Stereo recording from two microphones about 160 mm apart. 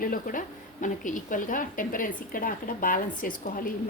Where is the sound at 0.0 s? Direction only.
60° left (ahead or behind).